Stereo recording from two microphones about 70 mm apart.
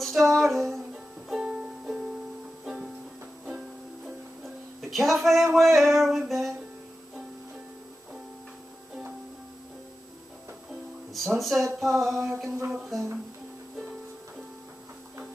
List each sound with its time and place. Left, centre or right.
0.0 s music: centre
1.3 s music: centre
4.8 s speech: centre
11.1 s speech: centre